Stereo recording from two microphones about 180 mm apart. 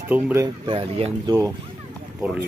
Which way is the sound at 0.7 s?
30° right (ahead or behind).